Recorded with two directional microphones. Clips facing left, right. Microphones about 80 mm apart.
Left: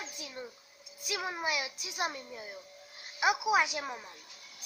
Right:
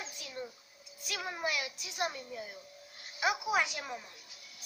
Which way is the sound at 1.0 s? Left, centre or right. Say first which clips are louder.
Left 2 dB; centre.